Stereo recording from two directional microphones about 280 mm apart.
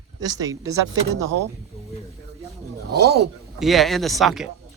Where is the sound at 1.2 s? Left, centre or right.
Right.